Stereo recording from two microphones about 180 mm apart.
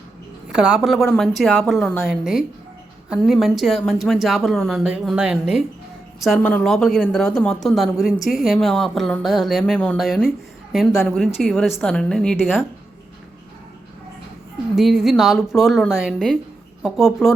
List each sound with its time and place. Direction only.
0.5 s speech: 5° right (ahead or behind)
14.8 s speech: centre (ahead or behind)